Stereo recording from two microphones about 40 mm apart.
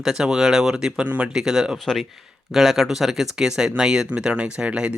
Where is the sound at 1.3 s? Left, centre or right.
Centre.